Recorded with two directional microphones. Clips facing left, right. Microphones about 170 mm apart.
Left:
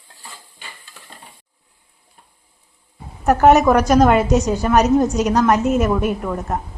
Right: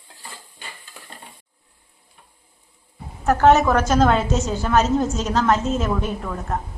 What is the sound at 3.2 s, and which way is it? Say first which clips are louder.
A woman's voice: left 3 dB; 15° left (ahead or behind).